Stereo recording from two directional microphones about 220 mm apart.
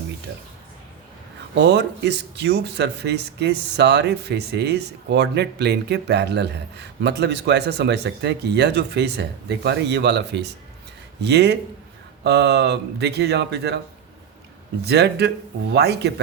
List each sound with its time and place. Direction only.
0.3 s speech: 55° right (ahead or behind)
1.5 s speech: 50° right (ahead or behind)
14.8 s speech: 50° right (ahead or behind)